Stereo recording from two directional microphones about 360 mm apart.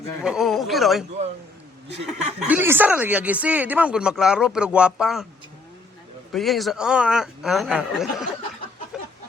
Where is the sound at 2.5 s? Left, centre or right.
Centre.